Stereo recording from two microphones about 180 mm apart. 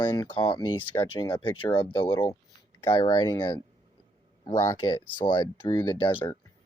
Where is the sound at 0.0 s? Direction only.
25° left (ahead or behind).